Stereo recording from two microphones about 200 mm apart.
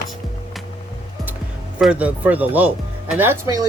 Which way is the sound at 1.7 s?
5° right (ahead or behind).